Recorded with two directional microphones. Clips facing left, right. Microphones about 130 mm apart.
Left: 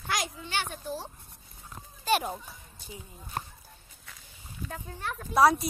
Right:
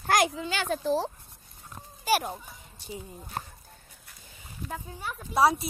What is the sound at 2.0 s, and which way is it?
Speech, centre (ahead or behind).